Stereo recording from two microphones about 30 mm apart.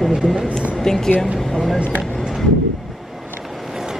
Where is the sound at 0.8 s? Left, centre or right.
Centre.